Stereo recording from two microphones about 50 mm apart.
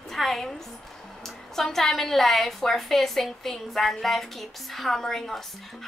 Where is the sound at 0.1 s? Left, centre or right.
Centre.